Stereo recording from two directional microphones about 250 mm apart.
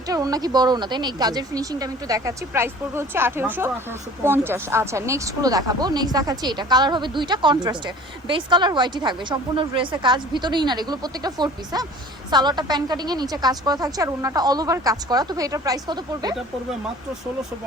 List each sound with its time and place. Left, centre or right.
0.1 s a woman's voice: centre